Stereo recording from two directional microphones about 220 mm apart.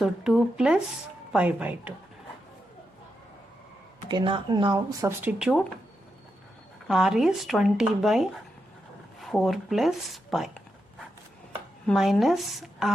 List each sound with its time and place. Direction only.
0.0 s speech: 5° right (ahead or behind)
4.1 s speech: 20° right (ahead or behind); by 5.6 s centre (ahead or behind)
6.8 s speech: centre (ahead or behind)
11.9 s speech: centre (ahead or behind)